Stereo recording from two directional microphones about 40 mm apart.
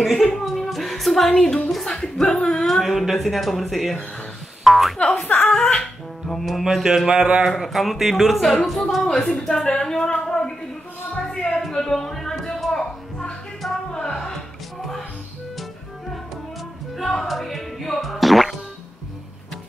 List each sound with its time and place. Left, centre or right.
0.0 s a sound: centre
1.9 s speech: centre
2.6 s a woman's voice: centre
4.9 s speech: left
5.5 s music: centre
6.3 s a woman's voice: centre
6.6 s speech: centre
7.2 s speech: right
7.4 s a woman's voice: centre
9.3 s speech: centre
11.1 s a sound: centre
11.7 s music: centre
12.7 s music: centre
16.9 s speech: centre